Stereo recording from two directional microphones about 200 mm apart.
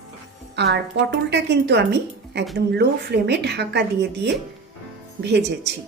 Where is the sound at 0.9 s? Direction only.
60° right (ahead or behind).